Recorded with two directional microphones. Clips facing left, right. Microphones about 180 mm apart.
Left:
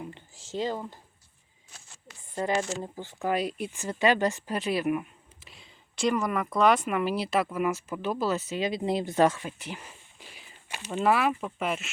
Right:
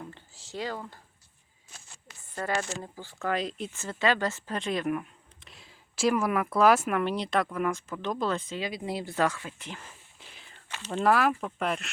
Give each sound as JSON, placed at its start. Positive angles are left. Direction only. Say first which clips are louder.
{"t": 0.0, "sound": "speech", "louder": "left 3 dB", "side_deg": 20}
{"t": 2.3, "sound": "speech", "louder": "left 3 dB", "side_deg": 15}
{"t": 8.6, "sound": "speech", "louder": "left 5 dB", "side_deg": 25}